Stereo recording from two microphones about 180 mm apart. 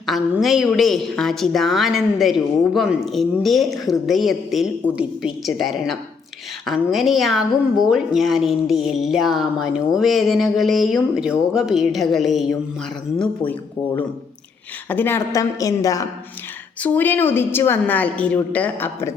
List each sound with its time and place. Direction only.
0.0 s a woman's voice: centre (ahead or behind)
14.8 s a woman's voice: 10° left (ahead or behind)